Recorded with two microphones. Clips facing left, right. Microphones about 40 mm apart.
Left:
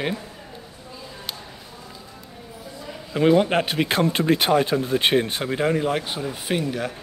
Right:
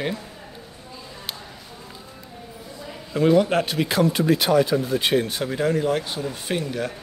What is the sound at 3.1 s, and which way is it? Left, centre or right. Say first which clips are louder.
A man's voice: even; left.